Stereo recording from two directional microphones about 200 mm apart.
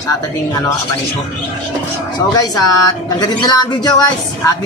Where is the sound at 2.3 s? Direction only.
20° left (ahead or behind).